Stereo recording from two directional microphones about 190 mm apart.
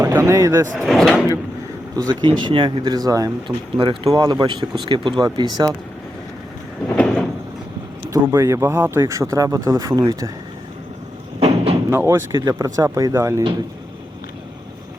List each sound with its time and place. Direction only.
0.0 s speech: 15° right (ahead or behind)
0.8 s speech: centre (ahead or behind)
2.0 s speech: 25° right (ahead or behind)
6.9 s sliding door: 5° left (ahead or behind)
8.1 s speech: 15° right (ahead or behind)
11.3 s a sound: 30° right (ahead or behind)
11.9 s speech: 10° right (ahead or behind)